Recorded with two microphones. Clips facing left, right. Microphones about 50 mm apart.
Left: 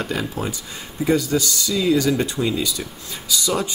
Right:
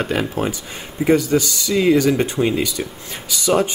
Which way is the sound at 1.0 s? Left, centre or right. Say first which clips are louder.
Right 4 dB; right.